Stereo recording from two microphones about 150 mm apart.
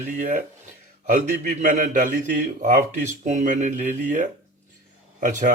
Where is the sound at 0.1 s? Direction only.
65° right (ahead or behind).